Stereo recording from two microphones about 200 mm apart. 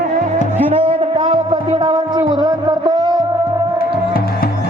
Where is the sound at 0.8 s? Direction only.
25° right (ahead or behind).